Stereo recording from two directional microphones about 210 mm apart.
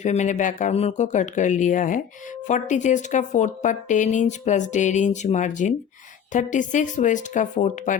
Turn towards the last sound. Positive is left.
turn(degrees=35)  # may be behind; listen again after turning